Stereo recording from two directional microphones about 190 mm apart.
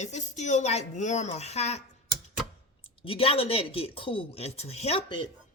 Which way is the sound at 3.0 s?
30° left (ahead or behind).